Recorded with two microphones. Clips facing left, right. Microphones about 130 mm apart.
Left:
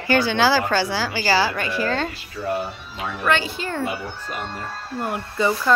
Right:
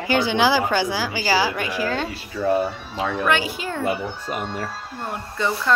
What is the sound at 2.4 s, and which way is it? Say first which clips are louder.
Speech: right 5 dB; 90° right.